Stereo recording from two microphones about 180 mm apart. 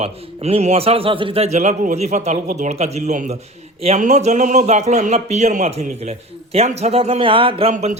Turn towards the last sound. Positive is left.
turn(degrees=-40)  # may be behind; listen again after turning